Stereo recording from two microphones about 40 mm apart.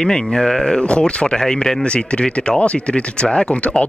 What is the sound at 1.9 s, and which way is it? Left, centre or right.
Speech, left.